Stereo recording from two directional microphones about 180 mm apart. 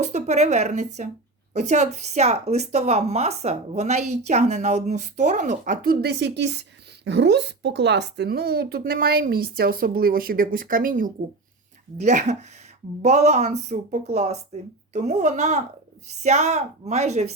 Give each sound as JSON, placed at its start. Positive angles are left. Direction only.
{"t": 0.0, "sound": "speech", "side_deg": -40}